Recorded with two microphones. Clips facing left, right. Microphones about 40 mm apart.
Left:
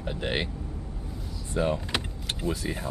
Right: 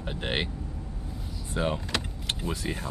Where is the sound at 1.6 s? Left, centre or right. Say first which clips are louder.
Left 2 dB; right.